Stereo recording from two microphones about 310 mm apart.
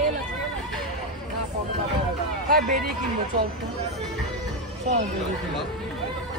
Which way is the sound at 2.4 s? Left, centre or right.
Right.